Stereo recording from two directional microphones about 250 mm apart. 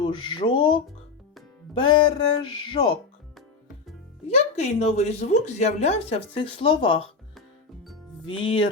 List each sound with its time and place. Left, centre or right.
0.0 s speech: centre
1.8 s speech: centre
4.3 s speech: left
8.4 s speech: centre